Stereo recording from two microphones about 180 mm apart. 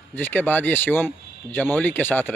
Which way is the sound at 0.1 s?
10° left (ahead or behind).